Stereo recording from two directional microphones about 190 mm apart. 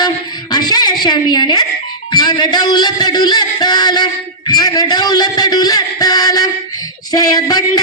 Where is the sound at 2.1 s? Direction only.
20° left (ahead or behind).